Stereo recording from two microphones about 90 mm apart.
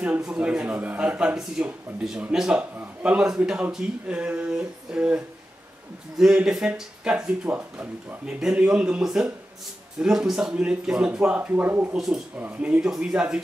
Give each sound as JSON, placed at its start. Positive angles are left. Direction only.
{"t": 0.0, "sound": "speech", "side_deg": -15}